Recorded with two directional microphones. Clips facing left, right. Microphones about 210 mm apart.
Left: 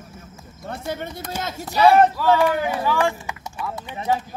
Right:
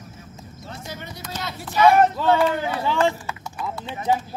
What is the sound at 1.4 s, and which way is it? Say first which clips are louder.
Speech: left 1 dB; 45° left (ahead or behind).